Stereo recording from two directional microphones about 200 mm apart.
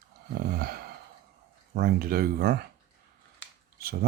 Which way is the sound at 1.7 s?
50° right (ahead or behind).